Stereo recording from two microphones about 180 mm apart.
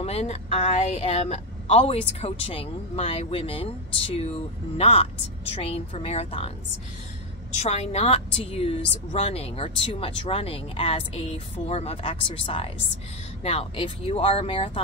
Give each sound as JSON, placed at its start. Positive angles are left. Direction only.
{"t": 0.0, "sound": "a woman's voice", "side_deg": 35}
{"t": 7.5, "sound": "a woman's voice", "side_deg": 35}